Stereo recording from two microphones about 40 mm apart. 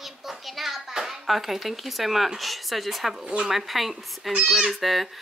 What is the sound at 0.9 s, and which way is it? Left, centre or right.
Speech, centre.